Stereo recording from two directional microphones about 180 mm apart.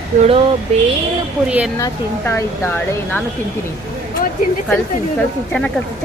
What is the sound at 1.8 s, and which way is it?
Speech, 10° left (ahead or behind).